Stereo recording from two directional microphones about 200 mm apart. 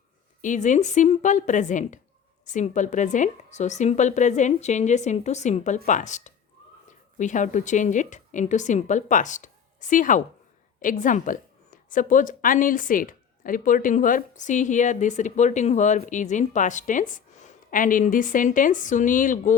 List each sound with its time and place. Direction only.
0.4 s a woman's voice: 40° left (ahead or behind)